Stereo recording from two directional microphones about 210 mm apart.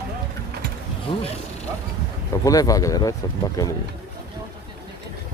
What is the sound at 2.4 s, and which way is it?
Speech, 15° left (ahead or behind).